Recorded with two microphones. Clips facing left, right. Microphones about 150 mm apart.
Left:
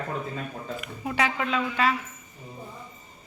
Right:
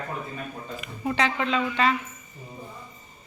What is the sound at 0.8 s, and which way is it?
Speech, 5° left (ahead or behind).